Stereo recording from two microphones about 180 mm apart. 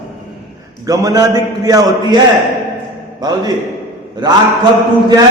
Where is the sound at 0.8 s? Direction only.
20° right (ahead or behind).